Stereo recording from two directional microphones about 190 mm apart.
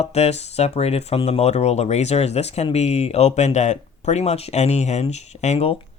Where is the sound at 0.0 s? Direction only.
35° left (ahead or behind).